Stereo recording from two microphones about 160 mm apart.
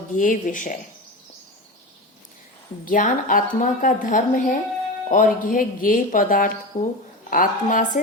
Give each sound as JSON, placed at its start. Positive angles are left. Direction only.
{"t": 0.1, "sound": "speech", "side_deg": 55}
{"t": 2.8, "sound": "a woman's voice", "side_deg": 55}
{"t": 6.7, "sound": "speech", "side_deg": 45}
{"t": 7.3, "sound": "a woman's voice", "side_deg": 60}